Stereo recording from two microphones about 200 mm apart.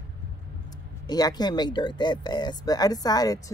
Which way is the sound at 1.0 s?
20° left (ahead or behind).